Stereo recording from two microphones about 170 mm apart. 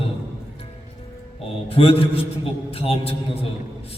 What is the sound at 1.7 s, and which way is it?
A man's voice, 35° left (ahead or behind).